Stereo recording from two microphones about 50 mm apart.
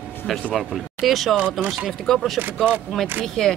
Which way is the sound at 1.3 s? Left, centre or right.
Right.